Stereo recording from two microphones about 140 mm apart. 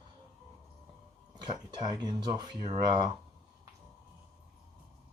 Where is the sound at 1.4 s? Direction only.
30° right (ahead or behind).